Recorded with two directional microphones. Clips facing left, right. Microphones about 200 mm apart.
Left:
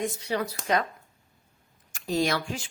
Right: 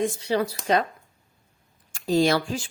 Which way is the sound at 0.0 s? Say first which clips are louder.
Right 5 dB; 30° right (ahead or behind).